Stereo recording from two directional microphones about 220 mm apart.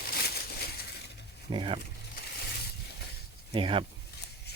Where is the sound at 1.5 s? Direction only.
25° right (ahead or behind).